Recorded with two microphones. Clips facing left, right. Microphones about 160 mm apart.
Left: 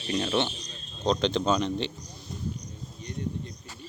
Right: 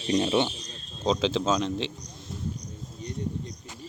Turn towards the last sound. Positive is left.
turn(degrees=-35)  # may be behind; listen again after turning